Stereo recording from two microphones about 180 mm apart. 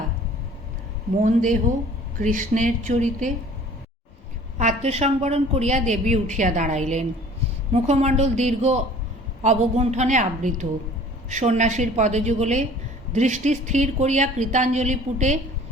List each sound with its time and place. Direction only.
1.2 s speech: 45° right (ahead or behind)
4.5 s a woman's voice: 40° right (ahead or behind)